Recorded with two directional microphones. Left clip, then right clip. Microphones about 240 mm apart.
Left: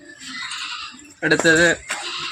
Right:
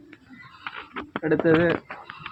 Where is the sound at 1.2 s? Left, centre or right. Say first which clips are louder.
Left 5 dB; left.